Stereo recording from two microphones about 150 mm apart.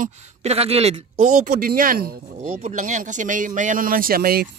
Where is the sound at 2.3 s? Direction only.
50° right (ahead or behind); by 4.5 s 80° right.